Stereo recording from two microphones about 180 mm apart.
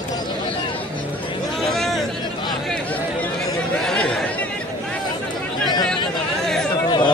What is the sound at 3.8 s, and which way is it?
Chatter, 5° left (ahead or behind).